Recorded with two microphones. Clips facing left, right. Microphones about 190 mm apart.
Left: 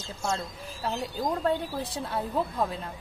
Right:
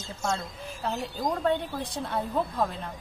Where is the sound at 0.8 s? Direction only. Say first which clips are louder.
Even; 5° left (ahead or behind).